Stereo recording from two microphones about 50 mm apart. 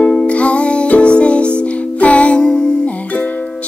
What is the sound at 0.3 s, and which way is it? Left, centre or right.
Music, left.